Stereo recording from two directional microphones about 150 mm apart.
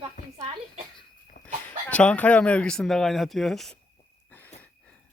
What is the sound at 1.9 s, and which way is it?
Speech, 10° left (ahead or behind).